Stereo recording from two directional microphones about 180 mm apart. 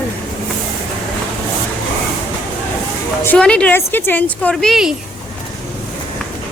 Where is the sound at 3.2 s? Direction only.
10° left (ahead or behind).